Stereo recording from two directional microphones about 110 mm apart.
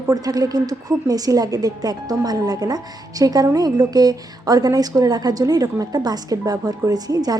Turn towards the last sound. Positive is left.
turn(degrees=-35)  # may be behind; listen again after turning